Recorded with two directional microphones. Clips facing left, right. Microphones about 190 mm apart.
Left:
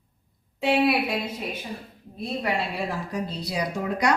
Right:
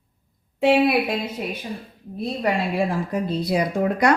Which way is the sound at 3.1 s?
55° right (ahead or behind).